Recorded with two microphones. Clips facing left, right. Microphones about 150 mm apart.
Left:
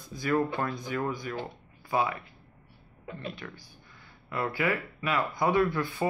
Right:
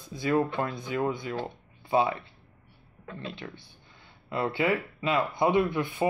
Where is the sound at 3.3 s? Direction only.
25° right (ahead or behind).